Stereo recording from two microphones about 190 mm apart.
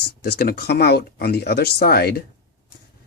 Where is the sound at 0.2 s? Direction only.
55° left (ahead or behind).